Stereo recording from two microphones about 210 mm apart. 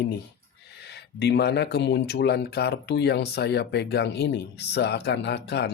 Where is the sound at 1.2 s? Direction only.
50° left (ahead or behind).